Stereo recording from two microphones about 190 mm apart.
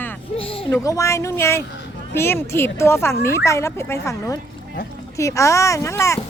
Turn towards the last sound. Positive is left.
turn(degrees=15)  # may be behind; listen again after turning